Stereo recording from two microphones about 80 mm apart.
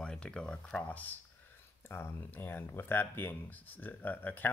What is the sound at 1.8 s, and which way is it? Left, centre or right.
Speech, left.